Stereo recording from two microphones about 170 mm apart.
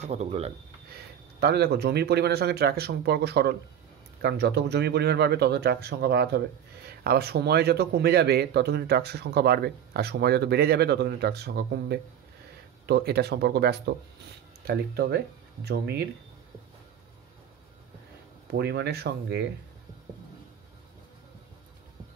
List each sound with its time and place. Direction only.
0.0 s speech: 40° right (ahead or behind)
0.9 s a man's voice: 70° right (ahead or behind)
18.5 s a man's voice: 75° right (ahead or behind)